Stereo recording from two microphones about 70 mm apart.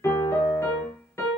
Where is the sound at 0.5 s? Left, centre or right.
Left.